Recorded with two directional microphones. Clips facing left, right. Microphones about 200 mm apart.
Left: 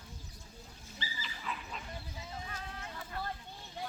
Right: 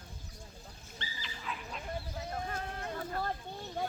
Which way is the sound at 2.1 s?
60° right (ahead or behind).